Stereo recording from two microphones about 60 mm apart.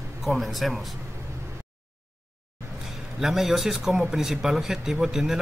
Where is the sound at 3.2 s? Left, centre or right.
Centre.